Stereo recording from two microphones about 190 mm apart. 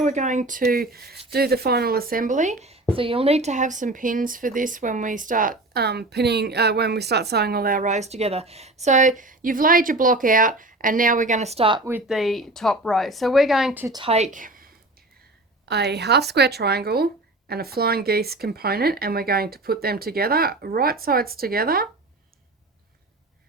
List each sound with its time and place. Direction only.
0.0 s speech: 40° right (ahead or behind)
11.9 s a woman's voice: 5° right (ahead or behind)
13.8 s a woman's voice: 20° right (ahead or behind)
14.1 s a woman's voice: 40° right (ahead or behind)
15.6 s a woman's voice: 60° right (ahead or behind)